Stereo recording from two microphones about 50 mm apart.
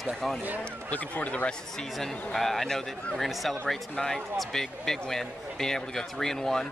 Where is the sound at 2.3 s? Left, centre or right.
Centre.